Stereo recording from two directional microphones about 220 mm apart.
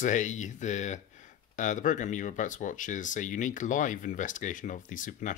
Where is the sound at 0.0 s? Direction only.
35° left (ahead or behind).